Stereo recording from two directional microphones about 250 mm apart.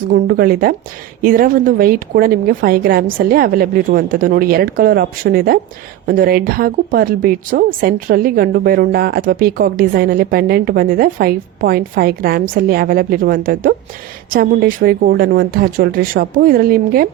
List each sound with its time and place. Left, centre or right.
0.1 s a woman's voice: right